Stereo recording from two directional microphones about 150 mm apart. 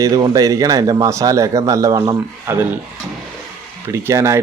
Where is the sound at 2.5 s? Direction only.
15° right (ahead or behind).